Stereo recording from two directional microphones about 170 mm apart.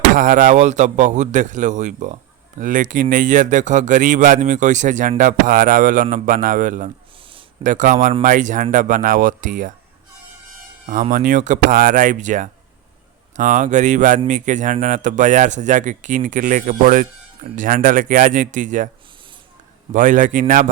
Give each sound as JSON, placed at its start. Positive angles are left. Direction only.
{"t": 0.1, "sound": "speech", "side_deg": -50}
{"t": 11.1, "sound": "speech", "side_deg": -50}
{"t": 19.9, "sound": "speech", "side_deg": -50}